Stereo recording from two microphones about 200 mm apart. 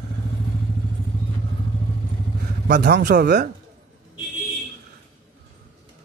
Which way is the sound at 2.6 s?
55° right (ahead or behind).